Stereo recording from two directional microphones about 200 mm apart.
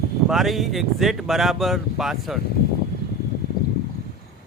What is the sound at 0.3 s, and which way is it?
Speech, centre (ahead or behind).